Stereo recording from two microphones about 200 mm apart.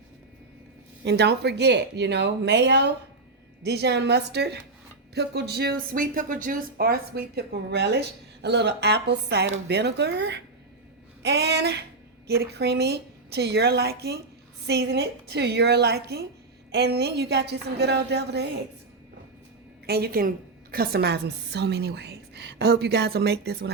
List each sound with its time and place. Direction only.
1.0 s a woman's voice: 55° right (ahead or behind)
19.9 s a woman's voice: 50° right (ahead or behind)